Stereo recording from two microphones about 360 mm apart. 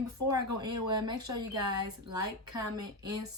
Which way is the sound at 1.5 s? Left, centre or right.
Right.